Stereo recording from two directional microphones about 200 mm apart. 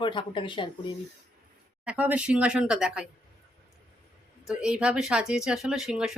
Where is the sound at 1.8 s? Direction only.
5° right (ahead or behind).